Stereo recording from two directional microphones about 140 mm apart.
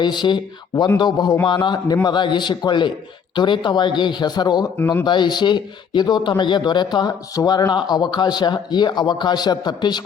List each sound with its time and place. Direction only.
0.0 s speech: 30° left (ahead or behind)